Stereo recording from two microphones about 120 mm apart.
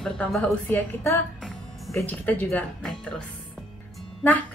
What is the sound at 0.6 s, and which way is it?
A woman's voice, 15° left (ahead or behind).